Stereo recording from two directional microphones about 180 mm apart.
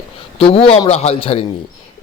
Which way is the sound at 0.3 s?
30° left (ahead or behind).